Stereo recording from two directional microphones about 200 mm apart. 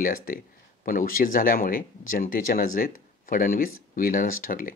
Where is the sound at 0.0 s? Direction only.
45° left (ahead or behind).